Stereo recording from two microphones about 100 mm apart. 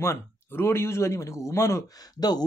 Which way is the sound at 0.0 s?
25° left (ahead or behind).